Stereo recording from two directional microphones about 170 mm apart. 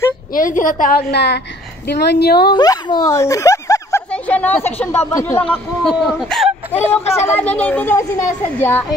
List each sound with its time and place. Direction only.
0.3 s a woman's voice: 50° left (ahead or behind)
1.1 s a woman's voice: 85° left; by 2.5 s 70° left (ahead or behind)
2.5 s speech: 25° left (ahead or behind)
4.1 s a child's voice: 10° left (ahead or behind)